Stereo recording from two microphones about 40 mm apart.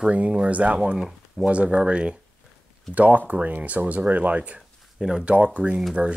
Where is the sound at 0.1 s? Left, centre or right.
Right.